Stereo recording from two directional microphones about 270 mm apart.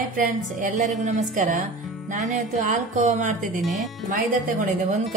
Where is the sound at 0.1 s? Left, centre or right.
Right.